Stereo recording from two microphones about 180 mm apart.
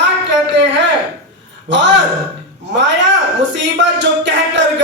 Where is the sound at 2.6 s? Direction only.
80° right.